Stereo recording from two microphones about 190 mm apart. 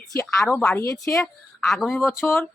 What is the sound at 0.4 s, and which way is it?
Speech, 10° left (ahead or behind).